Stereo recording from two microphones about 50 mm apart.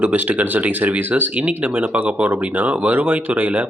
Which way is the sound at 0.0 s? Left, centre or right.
Right.